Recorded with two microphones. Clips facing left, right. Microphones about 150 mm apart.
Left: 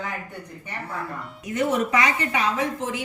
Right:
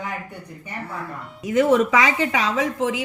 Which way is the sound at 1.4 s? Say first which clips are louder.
Right 6 dB; 90° right.